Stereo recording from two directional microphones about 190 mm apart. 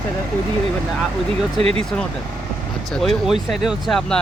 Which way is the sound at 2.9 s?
Centre (ahead or behind).